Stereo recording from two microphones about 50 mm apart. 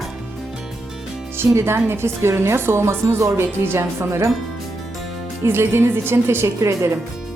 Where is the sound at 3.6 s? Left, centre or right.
Right.